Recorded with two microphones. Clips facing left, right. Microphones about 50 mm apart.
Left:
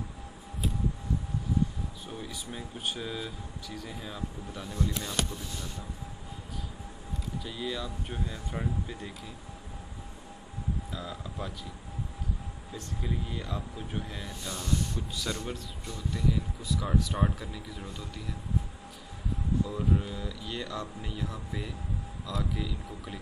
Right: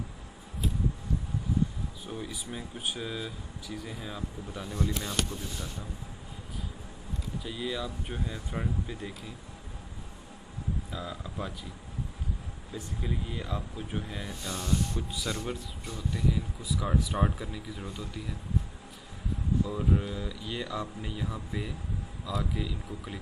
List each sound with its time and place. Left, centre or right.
2.0 s speech: centre
7.4 s speech: centre
10.9 s speech: centre
12.7 s speech: centre
14.5 s speech: right
15.1 s speech: centre
19.6 s speech: centre